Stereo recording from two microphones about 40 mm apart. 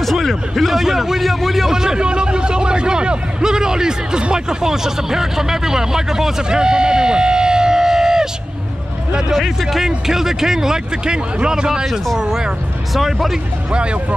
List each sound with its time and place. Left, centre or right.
0.0 s a man's voice: centre
9.6 s a man's voice: centre
12.9 s speech: centre